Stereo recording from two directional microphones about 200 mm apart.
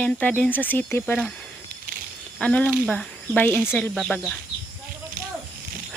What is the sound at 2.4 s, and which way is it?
Speech, 5° left (ahead or behind).